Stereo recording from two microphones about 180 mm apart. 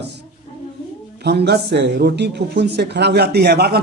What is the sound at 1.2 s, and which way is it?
A man's voice, 65° right (ahead or behind).